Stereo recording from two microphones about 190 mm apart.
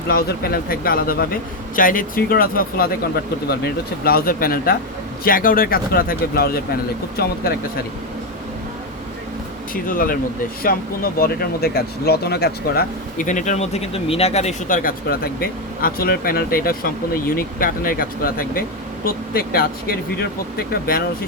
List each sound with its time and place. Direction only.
0.1 s speech: 50° left (ahead or behind)
9.7 s speech: 45° left (ahead or behind)